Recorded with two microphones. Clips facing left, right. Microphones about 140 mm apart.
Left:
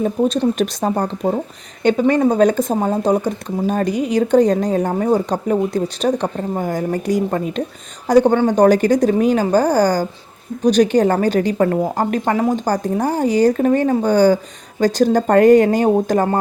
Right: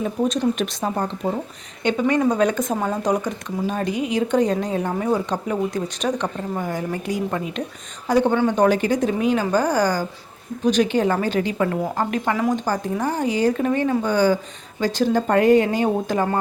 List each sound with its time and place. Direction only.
0.6 s a woman's voice: 40° left (ahead or behind)
3.7 s a woman's voice: 45° left (ahead or behind)